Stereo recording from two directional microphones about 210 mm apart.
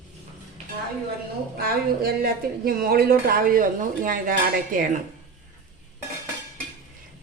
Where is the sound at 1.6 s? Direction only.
45° right (ahead or behind).